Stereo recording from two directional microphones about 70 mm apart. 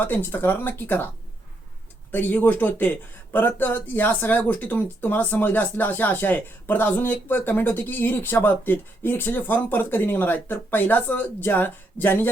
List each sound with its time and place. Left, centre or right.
0.0 s speech: left
2.1 s speech: left